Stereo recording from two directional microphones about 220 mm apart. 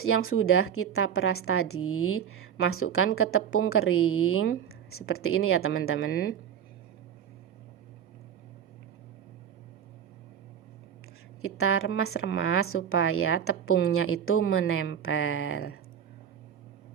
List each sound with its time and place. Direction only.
0.0 s a woman's voice: 70° left (ahead or behind)
6.0 s speech: 45° left (ahead or behind)
11.4 s a woman's voice: 75° left (ahead or behind)